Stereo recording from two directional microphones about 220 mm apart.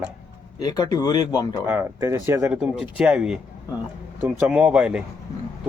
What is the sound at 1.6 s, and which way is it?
Speech, 10° right (ahead or behind).